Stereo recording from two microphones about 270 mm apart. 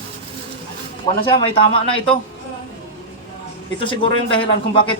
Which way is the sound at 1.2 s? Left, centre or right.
Centre.